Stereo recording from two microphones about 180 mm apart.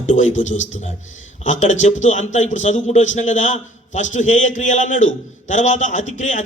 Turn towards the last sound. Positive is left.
turn(degrees=45)  # may be behind; listen again after turning